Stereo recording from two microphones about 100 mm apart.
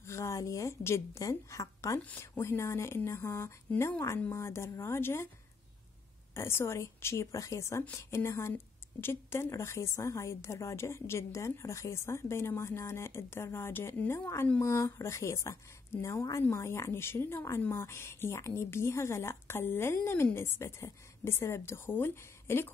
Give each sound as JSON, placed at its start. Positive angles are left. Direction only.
{"t": 0.0, "sound": "a woman's voice", "side_deg": 30}
{"t": 6.3, "sound": "a woman's voice", "side_deg": 25}